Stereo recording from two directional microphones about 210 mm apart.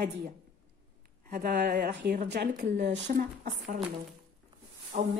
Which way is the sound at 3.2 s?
35° right (ahead or behind).